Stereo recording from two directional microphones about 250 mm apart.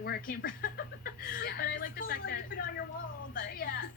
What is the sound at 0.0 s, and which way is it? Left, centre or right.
A woman's voice, left.